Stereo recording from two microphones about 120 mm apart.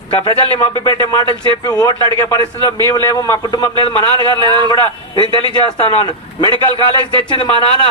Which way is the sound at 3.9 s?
40° right (ahead or behind).